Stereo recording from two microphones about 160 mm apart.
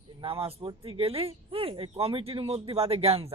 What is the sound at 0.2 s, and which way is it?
A woman's voice, 35° right (ahead or behind).